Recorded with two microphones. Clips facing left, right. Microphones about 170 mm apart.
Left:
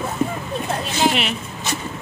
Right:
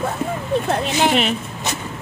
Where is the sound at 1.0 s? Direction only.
45° right (ahead or behind).